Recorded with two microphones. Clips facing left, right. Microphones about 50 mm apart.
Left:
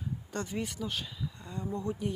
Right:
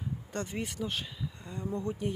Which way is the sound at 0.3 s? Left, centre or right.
Right.